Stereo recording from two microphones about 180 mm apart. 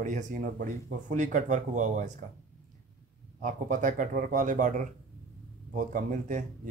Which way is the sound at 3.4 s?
45° right (ahead or behind).